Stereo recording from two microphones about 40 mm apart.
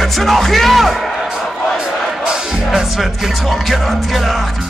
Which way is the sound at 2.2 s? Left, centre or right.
Centre.